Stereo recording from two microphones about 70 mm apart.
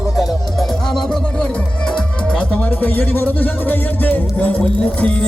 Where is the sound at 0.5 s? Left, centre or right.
Centre.